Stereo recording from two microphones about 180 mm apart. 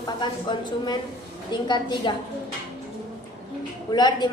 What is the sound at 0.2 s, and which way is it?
A woman's voice, 25° left (ahead or behind).